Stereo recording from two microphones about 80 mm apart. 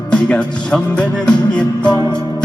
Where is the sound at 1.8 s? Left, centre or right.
Left.